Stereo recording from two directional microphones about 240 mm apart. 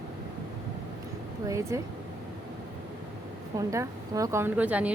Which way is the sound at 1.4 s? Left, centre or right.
Centre.